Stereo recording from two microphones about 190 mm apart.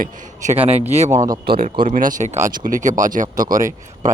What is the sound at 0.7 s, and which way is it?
Speech, 35° right (ahead or behind).